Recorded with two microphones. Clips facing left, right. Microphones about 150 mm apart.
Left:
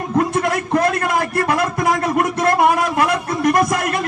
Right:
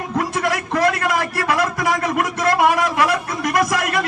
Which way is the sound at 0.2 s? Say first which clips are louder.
Left 4 dB; 45° left (ahead or behind).